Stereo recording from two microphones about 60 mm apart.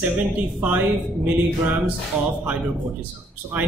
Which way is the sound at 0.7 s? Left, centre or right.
Right.